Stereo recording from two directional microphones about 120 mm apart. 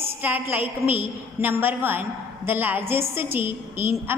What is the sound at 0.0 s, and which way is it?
A woman's voice, 15° right (ahead or behind).